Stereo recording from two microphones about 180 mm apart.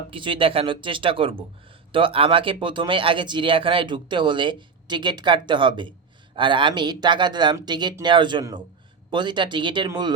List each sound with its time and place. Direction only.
0.1 s speech: 30° right (ahead or behind)